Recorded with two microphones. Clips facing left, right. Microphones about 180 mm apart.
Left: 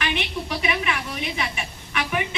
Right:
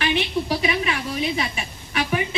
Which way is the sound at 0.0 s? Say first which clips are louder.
Right 5 dB; 35° right (ahead or behind).